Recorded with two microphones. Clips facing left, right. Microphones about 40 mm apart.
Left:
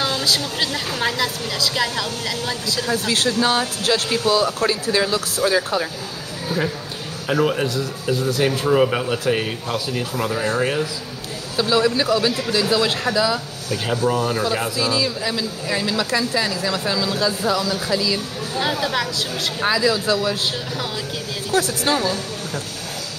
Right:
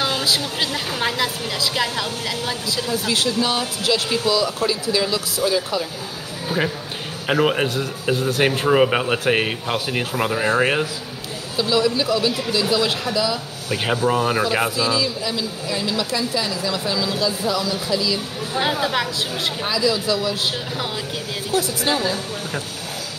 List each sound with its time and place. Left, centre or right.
0.0 s a woman's voice: centre
2.9 s speech: left
7.2 s a man's voice: right
11.5 s speech: left
13.7 s speech: right
16.0 s a woman's voice: left
16.4 s speech: left
18.6 s a woman's voice: centre
19.6 s speech: left
21.5 s speech: left
22.0 s speech: right